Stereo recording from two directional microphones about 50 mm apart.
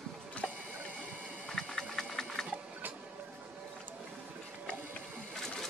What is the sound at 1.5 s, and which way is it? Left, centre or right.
Sewing machine, centre.